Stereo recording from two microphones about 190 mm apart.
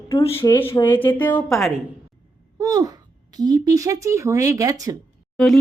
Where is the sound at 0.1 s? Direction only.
30° left (ahead or behind).